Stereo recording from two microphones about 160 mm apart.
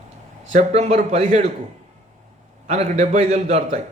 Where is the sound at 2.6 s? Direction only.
45° right (ahead or behind).